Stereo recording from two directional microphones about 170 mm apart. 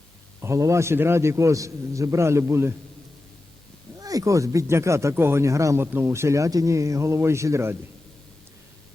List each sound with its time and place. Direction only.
0.4 s speech: 15° right (ahead or behind)
4.0 s speech: 20° right (ahead or behind)